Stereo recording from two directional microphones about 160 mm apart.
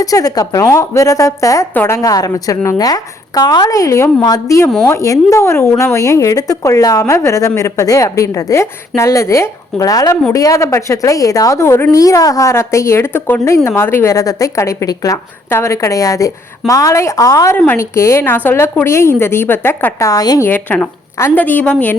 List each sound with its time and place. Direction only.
0.0 s a woman's voice: 20° left (ahead or behind)
20.5 s a woman's voice: 10° left (ahead or behind)